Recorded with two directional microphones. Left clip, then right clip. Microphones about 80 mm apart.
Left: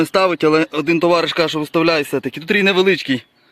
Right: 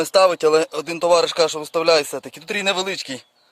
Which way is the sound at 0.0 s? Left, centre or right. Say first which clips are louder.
Even; right.